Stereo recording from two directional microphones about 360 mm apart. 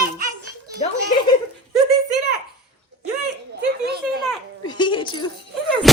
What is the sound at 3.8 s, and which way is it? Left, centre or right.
Speech, right.